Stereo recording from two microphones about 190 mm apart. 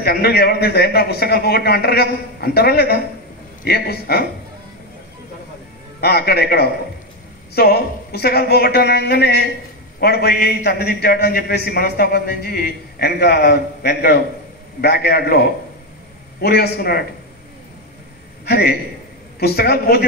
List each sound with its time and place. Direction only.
0.0 s a man's voice: 55° left (ahead or behind)
5.9 s a man's voice: 55° left (ahead or behind)
18.4 s a man's voice: 55° left (ahead or behind)